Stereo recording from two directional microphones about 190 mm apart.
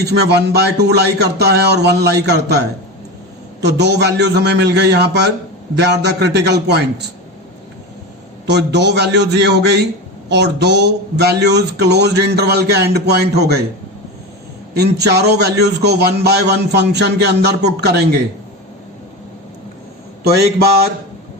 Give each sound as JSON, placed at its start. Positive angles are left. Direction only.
{"t": 0.0, "sound": "a man's voice", "side_deg": -60}
{"t": 3.6, "sound": "a man's voice", "side_deg": -60}
{"t": 8.4, "sound": "a man's voice", "side_deg": -65}
{"t": 14.7, "sound": "a man's voice", "side_deg": -60}
{"t": 20.2, "sound": "a man's voice", "side_deg": -55}